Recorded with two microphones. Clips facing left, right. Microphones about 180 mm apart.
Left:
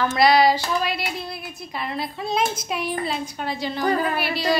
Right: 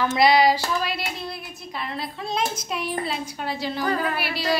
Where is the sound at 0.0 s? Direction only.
20° right (ahead or behind).